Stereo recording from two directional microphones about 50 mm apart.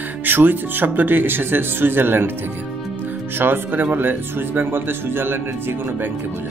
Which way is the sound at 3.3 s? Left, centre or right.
Right.